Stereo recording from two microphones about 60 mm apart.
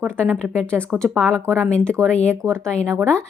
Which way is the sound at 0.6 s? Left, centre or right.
Centre.